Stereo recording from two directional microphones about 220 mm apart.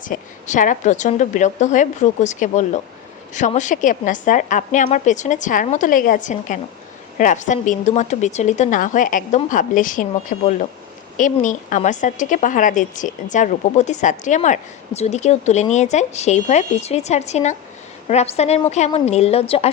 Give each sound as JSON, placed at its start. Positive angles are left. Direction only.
{"t": 0.0, "sound": "a woman's voice", "side_deg": 35}